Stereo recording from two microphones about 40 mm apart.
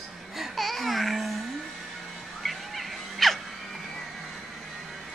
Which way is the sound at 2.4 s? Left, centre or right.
Centre.